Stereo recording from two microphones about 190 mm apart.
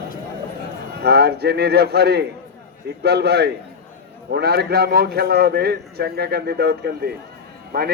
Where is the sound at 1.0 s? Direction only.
60° right (ahead or behind).